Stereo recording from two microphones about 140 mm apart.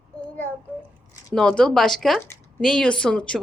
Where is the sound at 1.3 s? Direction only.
5° left (ahead or behind).